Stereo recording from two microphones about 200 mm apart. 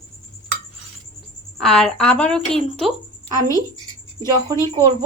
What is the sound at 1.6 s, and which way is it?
Speech, centre (ahead or behind).